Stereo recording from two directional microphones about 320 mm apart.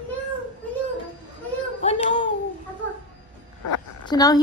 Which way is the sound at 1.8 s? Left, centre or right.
Centre.